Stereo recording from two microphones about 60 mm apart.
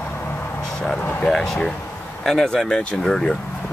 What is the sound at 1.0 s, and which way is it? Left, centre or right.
Vehicle, left.